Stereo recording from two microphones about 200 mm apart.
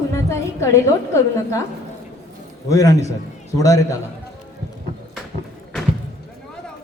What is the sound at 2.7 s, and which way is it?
A woman's voice, 15° left (ahead or behind).